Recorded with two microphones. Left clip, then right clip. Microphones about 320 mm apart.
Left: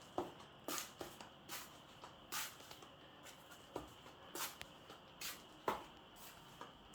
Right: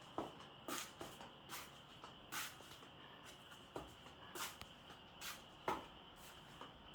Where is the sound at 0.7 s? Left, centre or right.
Left.